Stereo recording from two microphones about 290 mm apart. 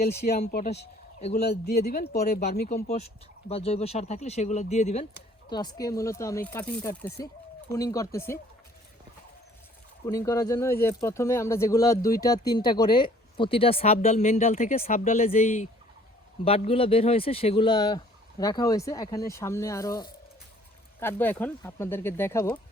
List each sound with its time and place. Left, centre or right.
0.0 s speech: left
1.4 s speech: left; by 8.4 s centre
10.1 s speech: centre